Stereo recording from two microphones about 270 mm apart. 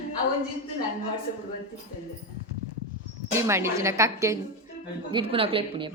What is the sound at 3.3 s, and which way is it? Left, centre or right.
A woman's voice, centre.